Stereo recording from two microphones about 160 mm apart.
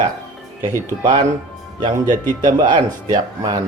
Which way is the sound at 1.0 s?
30° right (ahead or behind).